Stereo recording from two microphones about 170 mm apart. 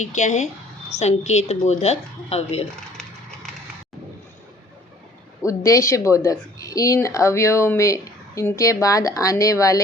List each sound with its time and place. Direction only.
0.0 s a woman's voice: 45° left (ahead or behind)
5.5 s speech: 20° left (ahead or behind)